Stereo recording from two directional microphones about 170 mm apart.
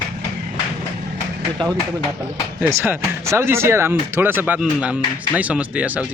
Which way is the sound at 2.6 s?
10° right (ahead or behind).